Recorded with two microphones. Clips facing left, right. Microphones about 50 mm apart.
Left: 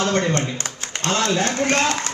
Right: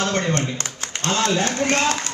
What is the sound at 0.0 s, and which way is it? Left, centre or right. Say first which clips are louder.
A man's voice: left 2 dB; left.